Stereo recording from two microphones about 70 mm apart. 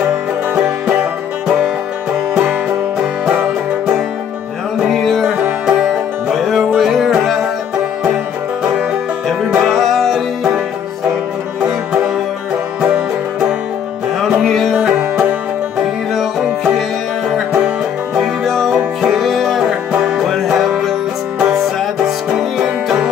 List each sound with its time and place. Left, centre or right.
0.6 s music: centre
3.3 s music: centre
4.8 s music: centre
9.6 s music: centre
12.8 s music: centre
14.4 s music: centre
22.4 s music: centre